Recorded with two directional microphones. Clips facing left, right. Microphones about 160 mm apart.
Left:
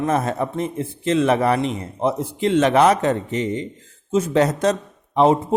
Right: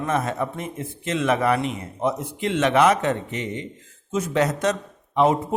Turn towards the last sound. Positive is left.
turn(degrees=35)  # may be behind; listen again after turning